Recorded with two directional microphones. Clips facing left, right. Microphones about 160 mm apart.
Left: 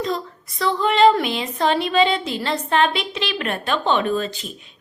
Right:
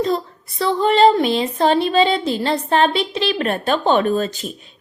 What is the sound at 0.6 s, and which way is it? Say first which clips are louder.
A woman's voice: right 2 dB; 35° right (ahead or behind).